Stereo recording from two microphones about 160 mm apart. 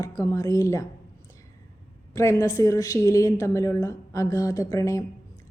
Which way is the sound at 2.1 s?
15° left (ahead or behind).